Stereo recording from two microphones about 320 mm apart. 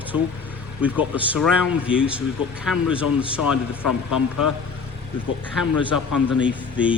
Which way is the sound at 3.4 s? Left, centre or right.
Left.